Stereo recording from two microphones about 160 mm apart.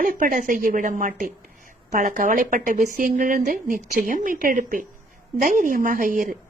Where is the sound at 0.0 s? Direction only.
60° right (ahead or behind).